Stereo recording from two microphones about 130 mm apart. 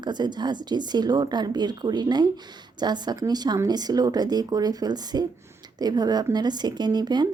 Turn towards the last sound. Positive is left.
turn(degrees=-35)  # may be behind; listen again after turning